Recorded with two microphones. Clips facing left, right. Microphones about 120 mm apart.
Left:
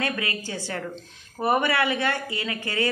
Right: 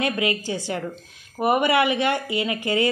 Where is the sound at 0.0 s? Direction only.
20° right (ahead or behind).